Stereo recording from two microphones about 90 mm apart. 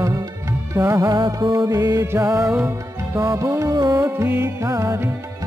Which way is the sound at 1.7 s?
40° right (ahead or behind).